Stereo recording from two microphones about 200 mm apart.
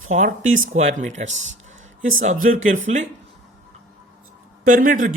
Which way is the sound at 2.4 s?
40° right (ahead or behind).